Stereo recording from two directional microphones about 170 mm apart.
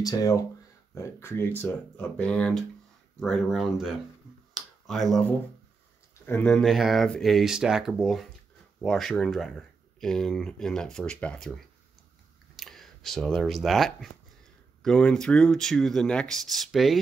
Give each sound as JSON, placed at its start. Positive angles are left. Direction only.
{"t": 0.0, "sound": "speech", "side_deg": 20}
{"t": 4.6, "sound": "finger snapping", "side_deg": 0}
{"t": 6.2, "sound": "speech", "side_deg": 10}